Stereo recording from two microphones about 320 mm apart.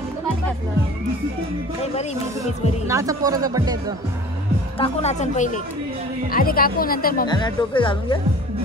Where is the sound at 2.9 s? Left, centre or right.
Centre.